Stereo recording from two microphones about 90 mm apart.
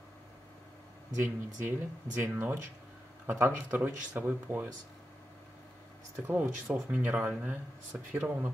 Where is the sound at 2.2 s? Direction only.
20° right (ahead or behind).